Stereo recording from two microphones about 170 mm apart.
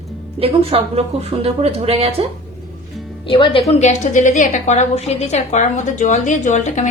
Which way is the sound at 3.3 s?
30° left (ahead or behind).